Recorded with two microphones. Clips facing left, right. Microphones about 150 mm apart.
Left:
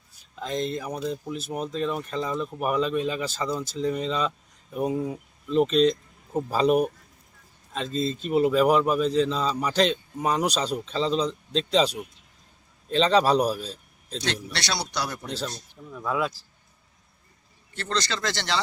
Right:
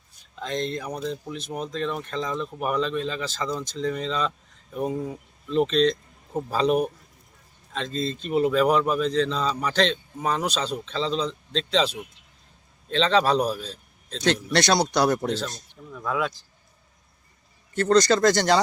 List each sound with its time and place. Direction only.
0.3 s speech: 5° left (ahead or behind)
12.9 s speech: 5° left (ahead or behind)
14.2 s speech: 45° right (ahead or behind)
15.9 s speech: 5° left (ahead or behind)
17.7 s speech: 45° right (ahead or behind)